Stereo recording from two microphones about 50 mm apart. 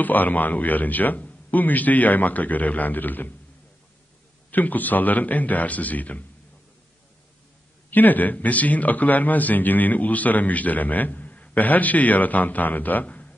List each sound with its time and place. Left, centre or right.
0.0 s a man's voice: left
4.5 s a man's voice: left
7.9 s a man's voice: left